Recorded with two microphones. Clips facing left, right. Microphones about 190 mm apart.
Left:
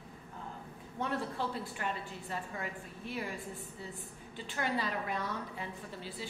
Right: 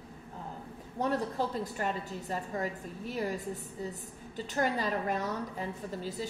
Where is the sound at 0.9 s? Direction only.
40° right (ahead or behind).